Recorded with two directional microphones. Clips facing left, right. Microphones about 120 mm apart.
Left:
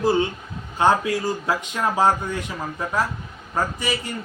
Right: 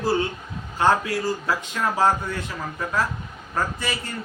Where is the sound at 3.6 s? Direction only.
15° left (ahead or behind).